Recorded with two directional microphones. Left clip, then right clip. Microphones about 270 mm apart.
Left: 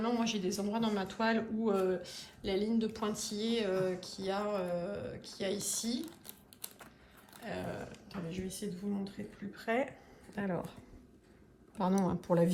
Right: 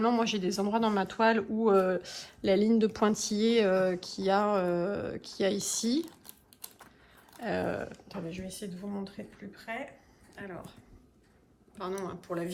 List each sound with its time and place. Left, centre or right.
0.0 s a man's voice: centre
9.7 s speech: centre
12.0 s speech: centre